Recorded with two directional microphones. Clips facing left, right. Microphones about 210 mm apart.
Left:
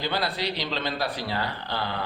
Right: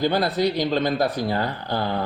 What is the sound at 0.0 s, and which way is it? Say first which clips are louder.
Speech: right 8 dB; 45° right (ahead or behind).